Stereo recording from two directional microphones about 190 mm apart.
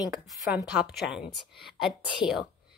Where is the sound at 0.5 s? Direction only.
5° right (ahead or behind).